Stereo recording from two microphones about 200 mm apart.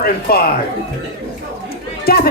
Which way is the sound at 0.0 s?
50° left (ahead or behind).